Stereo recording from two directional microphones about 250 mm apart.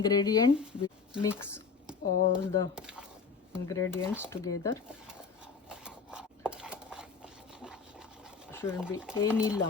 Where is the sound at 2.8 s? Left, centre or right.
Centre.